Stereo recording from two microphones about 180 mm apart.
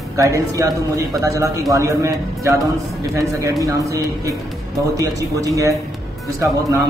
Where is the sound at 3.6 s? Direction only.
15° right (ahead or behind).